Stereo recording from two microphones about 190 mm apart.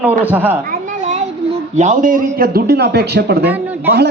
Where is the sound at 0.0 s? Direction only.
10° right (ahead or behind).